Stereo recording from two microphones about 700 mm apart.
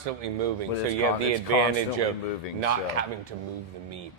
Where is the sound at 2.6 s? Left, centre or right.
Right.